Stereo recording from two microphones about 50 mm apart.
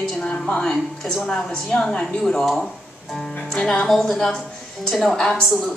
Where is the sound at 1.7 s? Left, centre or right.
Centre.